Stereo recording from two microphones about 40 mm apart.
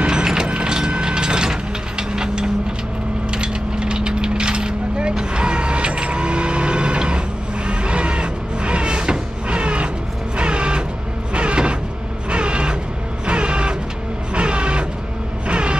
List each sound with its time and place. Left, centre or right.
0.0 s mechanisms: centre
1.0 s vehicle: right
3.3 s coin: right
7.6 s sheep: right
10.3 s music: right
11.3 s mechanisms: right
12.3 s a sound: right
13.3 s vehicle: right